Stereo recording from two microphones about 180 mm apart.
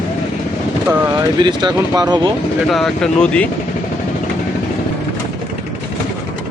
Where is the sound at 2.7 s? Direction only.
5° left (ahead or behind).